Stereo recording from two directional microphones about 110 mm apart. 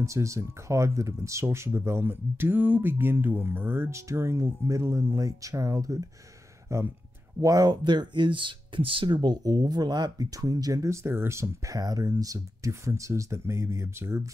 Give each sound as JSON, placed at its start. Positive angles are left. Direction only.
{"t": 0.0, "sound": "speech", "side_deg": -30}